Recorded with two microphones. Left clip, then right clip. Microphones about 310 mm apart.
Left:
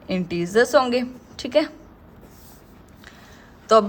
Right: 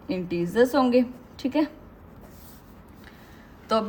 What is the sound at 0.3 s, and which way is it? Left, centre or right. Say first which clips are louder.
A woman's voice: left 3 dB; left.